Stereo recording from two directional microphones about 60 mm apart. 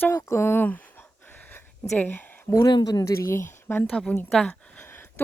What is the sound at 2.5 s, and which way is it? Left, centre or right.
Speech, left.